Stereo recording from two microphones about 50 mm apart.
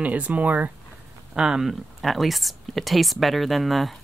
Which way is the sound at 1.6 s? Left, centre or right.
Centre.